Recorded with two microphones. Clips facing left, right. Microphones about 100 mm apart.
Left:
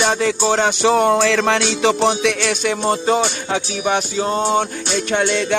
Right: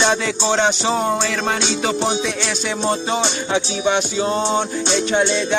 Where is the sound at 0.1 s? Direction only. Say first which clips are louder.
Left 2 dB; 40° left (ahead or behind).